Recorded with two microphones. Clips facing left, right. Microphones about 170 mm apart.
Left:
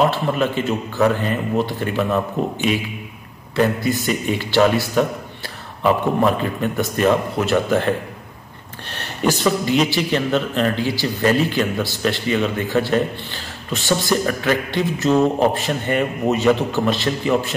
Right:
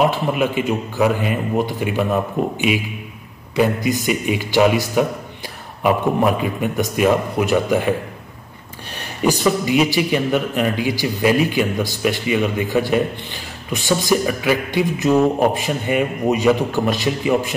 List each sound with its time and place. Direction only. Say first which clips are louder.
0.0 s a man's voice: right 1 dB; 10° right (ahead or behind)
8.9 s a man's voice: right 1 dB; 10° right (ahead or behind)